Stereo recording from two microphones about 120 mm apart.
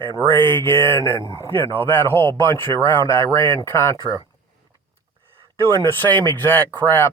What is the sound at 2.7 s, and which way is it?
Speech, 40° right (ahead or behind).